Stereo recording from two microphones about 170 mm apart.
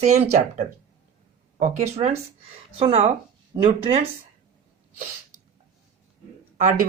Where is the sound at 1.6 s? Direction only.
40° right (ahead or behind).